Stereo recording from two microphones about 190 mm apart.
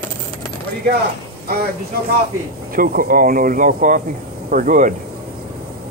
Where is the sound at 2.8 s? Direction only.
50° right (ahead or behind).